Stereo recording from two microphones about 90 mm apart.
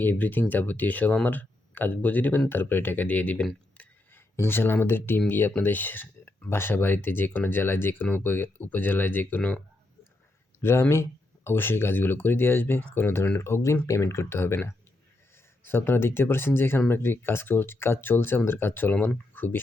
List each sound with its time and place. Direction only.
0.0 s speech: 20° left (ahead or behind)
3.8 s a sound: 25° left (ahead or behind)
5.3 s speech: 20° left (ahead or behind)
10.6 s speech: 30° left (ahead or behind)